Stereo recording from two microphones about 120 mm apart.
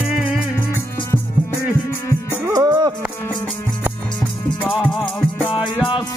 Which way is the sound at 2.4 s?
30° right (ahead or behind).